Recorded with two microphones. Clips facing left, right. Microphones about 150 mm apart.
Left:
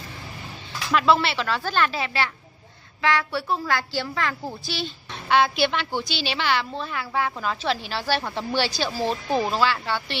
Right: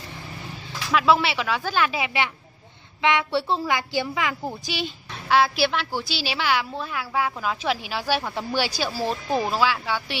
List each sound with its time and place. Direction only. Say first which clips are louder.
0.9 s a woman's voice: even; 10° right (ahead or behind); by 3.6 s 25° right (ahead or behind)
3.6 s speech: right 1 dB; 15° right (ahead or behind)